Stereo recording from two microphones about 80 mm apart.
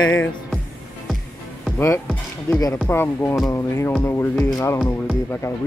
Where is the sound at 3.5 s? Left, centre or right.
Left.